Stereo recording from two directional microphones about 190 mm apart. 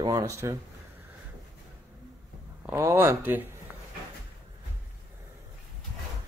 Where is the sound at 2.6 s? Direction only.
15° right (ahead or behind).